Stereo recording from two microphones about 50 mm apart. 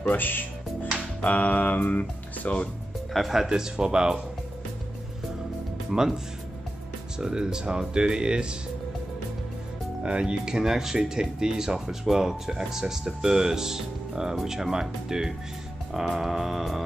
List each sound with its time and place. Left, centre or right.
0.1 s speech: left
1.2 s speech: left
3.1 s speech: centre
5.9 s speech: centre
10.0 s speech: centre
15.9 s music: centre